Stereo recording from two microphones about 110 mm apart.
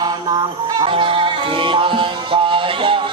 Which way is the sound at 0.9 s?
50° right (ahead or behind).